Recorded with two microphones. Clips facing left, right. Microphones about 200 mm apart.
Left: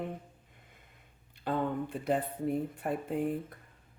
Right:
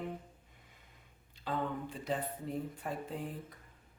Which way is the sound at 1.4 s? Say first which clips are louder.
Left 5 dB; 60° left (ahead or behind).